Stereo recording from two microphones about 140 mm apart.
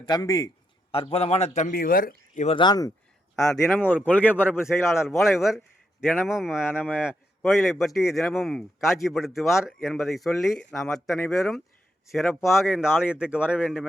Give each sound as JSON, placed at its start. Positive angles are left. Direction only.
{"t": 0.0, "sound": "a man's voice", "side_deg": 30}
{"t": 0.9, "sound": "a man's voice", "side_deg": 40}
{"t": 1.7, "sound": "speech", "side_deg": 90}
{"t": 2.6, "sound": "a man's voice", "side_deg": 30}
{"t": 3.3, "sound": "a man's voice", "side_deg": 5}
{"t": 5.0, "sound": "speech", "side_deg": 0}
{"t": 6.0, "sound": "a man's voice", "side_deg": 15}
{"t": 6.2, "sound": "speech", "side_deg": -5}
{"t": 6.6, "sound": "a man's voice", "side_deg": 15}
{"t": 6.8, "sound": "speech", "side_deg": -5}